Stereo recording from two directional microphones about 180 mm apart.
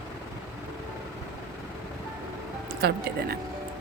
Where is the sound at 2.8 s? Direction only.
60° right (ahead or behind).